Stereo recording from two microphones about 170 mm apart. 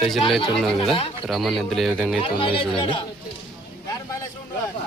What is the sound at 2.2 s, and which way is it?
Speech, 30° left (ahead or behind).